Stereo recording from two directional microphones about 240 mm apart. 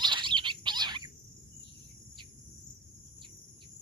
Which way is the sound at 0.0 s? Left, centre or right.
Centre.